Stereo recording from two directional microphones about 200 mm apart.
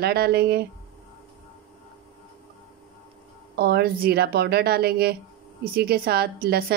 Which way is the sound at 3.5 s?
55° right (ahead or behind).